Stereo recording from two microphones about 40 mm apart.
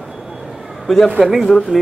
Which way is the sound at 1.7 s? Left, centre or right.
Right.